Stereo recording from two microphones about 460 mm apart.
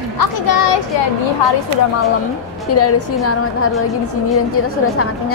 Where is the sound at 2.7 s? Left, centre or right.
Left.